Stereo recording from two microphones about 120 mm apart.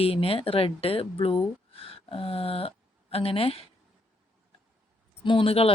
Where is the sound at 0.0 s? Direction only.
55° left (ahead or behind).